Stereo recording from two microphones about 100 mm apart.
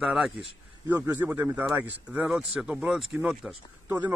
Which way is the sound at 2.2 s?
5° right (ahead or behind).